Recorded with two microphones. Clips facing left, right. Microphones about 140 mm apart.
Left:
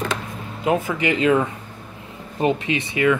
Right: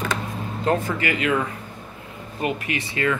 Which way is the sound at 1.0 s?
25° left (ahead or behind).